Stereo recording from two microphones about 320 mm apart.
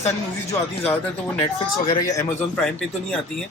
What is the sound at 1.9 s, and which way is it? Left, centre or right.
Speech, centre.